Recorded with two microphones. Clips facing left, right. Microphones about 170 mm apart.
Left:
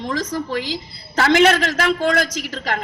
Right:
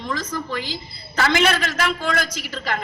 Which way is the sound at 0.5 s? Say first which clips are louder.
Left 4 dB; 75° left (ahead or behind).